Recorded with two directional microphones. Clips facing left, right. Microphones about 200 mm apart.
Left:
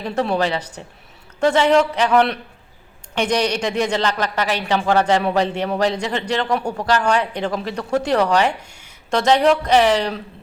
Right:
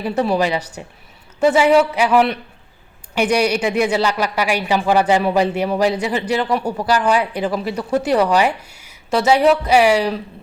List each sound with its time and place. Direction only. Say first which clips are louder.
0.0 s speech: right 2 dB; 5° right (ahead or behind)